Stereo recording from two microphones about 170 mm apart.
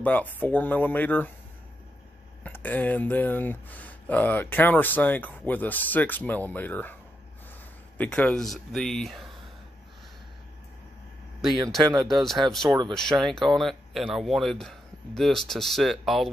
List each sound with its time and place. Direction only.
0.0 s speech: 10° left (ahead or behind)
2.4 s speech: 10° left (ahead or behind)
8.0 s speech: 10° left (ahead or behind)
12.1 s speech: centre (ahead or behind)
12.6 s speech: 20° right (ahead or behind)
13.2 s speech: centre (ahead or behind)